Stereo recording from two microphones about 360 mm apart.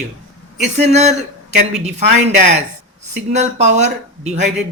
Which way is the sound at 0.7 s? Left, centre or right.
Centre.